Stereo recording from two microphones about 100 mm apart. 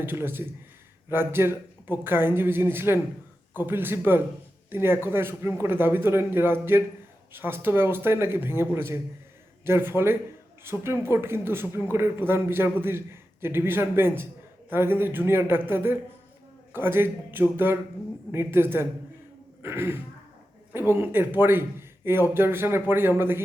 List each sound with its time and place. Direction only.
0.0 s speech: 20° right (ahead or behind)